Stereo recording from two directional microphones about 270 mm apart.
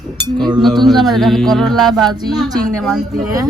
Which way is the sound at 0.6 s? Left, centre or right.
Centre.